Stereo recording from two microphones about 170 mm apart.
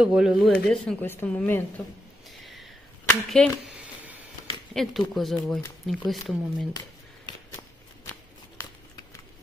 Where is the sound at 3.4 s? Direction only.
5° left (ahead or behind).